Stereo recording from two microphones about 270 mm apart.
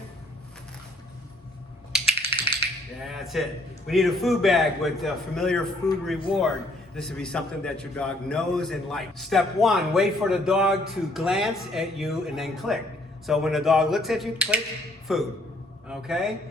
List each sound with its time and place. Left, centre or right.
2.1 s typing: left
3.1 s a man's voice: centre